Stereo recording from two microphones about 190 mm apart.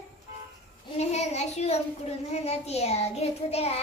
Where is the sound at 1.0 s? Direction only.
35° left (ahead or behind).